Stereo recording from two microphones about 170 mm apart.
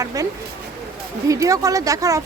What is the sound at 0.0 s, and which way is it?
Speech, 20° right (ahead or behind).